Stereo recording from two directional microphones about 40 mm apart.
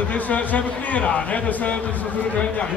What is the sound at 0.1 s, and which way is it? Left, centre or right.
A man's voice, left.